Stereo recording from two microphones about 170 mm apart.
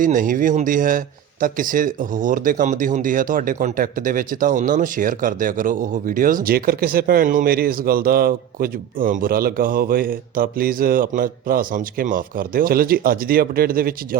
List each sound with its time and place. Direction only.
0.0 s a man's voice: 50° right (ahead or behind)